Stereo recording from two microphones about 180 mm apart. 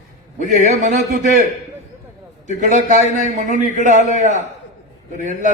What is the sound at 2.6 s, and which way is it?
A man's voice, 40° right (ahead or behind).